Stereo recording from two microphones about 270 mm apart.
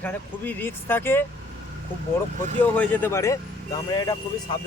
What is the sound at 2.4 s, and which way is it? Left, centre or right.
Speech, right.